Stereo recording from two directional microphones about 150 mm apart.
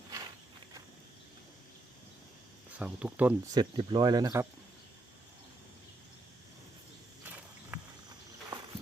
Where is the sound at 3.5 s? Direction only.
30° right (ahead or behind).